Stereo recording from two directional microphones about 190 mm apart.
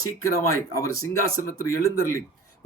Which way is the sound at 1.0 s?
20° left (ahead or behind).